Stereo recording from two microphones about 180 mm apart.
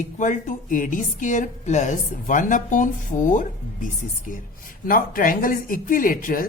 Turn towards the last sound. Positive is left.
turn(degrees=50)  # may be behind; listen again after turning